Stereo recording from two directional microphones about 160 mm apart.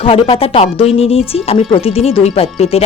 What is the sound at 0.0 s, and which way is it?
Speech, 35° left (ahead or behind).